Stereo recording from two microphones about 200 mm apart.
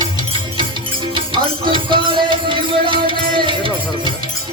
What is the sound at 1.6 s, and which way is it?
Music, 25° right (ahead or behind).